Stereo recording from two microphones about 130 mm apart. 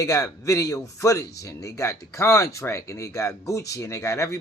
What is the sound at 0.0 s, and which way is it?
Speech, 25° left (ahead or behind).